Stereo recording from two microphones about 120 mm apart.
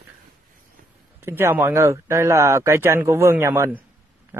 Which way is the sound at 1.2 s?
20° right (ahead or behind).